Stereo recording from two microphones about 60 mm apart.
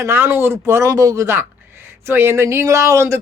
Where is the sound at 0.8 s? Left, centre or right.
Right.